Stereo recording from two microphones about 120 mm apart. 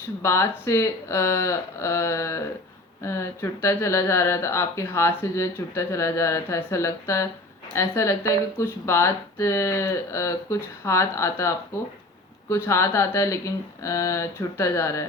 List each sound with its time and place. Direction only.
0.2 s speech: 20° left (ahead or behind)